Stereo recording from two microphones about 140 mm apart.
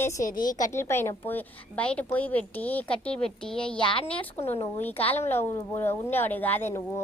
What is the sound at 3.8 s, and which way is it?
Speech, 35° left (ahead or behind).